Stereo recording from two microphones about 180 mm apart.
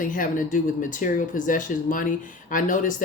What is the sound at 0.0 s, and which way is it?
Speech, 45° left (ahead or behind).